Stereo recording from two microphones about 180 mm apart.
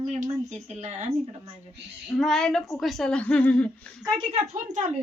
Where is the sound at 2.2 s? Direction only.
Centre (ahead or behind).